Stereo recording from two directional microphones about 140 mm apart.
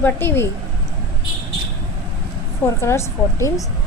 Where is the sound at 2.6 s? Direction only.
20° left (ahead or behind).